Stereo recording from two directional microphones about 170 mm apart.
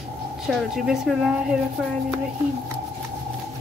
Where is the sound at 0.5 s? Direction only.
Centre (ahead or behind).